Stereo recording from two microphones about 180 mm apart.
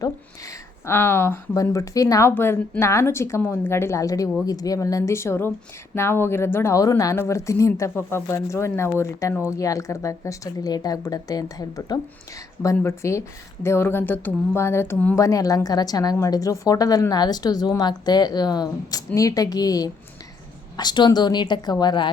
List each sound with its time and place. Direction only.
0.0 s a woman's voice: 15° left (ahead or behind)